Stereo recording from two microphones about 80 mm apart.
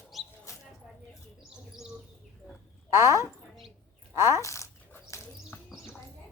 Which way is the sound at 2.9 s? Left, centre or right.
Right.